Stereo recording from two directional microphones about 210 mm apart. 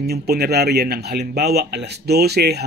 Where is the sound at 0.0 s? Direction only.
50° right (ahead or behind).